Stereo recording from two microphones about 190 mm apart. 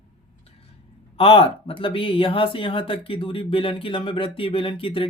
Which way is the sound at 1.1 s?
30° left (ahead or behind).